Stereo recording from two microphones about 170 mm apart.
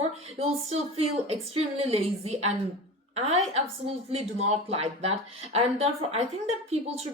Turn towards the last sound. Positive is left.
turn(degrees=-35)  # may be behind; listen again after turning